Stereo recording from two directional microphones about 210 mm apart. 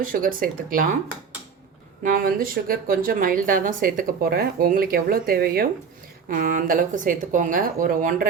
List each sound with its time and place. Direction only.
0.0 s speech: 40° right (ahead or behind)
2.0 s speech: 40° right (ahead or behind)